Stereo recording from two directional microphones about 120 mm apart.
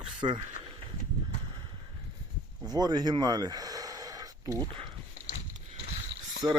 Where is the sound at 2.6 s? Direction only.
35° right (ahead or behind).